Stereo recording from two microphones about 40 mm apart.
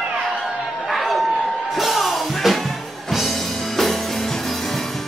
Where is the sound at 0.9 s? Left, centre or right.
Centre.